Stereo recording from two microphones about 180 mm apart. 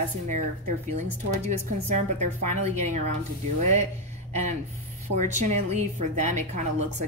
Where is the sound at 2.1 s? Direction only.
40° right (ahead or behind).